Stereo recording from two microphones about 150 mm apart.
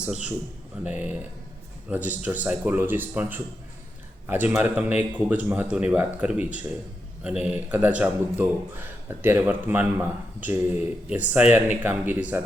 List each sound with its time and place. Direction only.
0.0 s a man's voice: 5° right (ahead or behind)